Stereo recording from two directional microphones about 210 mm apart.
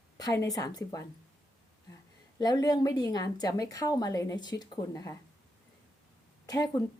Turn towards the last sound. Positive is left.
turn(degrees=15)  # may be behind; listen again after turning